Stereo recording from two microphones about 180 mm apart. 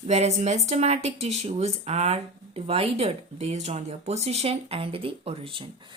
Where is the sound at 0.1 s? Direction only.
35° right (ahead or behind).